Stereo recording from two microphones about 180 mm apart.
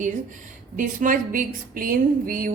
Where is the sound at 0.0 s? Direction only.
45° right (ahead or behind).